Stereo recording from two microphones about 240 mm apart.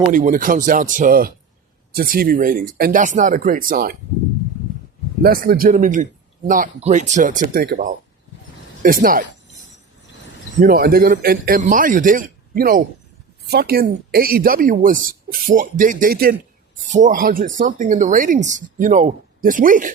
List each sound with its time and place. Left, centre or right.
0.1 s a woman's voice: right
5.2 s a woman's voice: right
10.6 s a woman's voice: right